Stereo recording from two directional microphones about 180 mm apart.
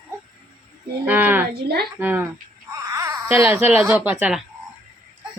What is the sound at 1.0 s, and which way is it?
Speech, 10° right (ahead or behind).